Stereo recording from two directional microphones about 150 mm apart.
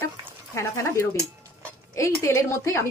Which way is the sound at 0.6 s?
20° left (ahead or behind).